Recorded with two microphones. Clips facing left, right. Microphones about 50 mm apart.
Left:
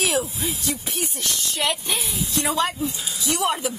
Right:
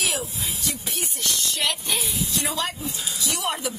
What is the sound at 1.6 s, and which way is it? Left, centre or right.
Speech, left.